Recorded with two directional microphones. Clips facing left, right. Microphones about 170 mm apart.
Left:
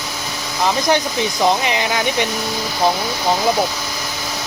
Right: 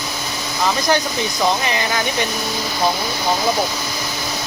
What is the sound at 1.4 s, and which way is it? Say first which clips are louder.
Speech: left 2 dB; 20° left (ahead or behind).